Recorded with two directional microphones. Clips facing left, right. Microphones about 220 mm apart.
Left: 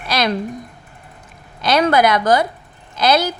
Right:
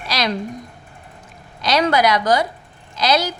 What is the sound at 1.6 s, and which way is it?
A woman's voice, 55° left (ahead or behind).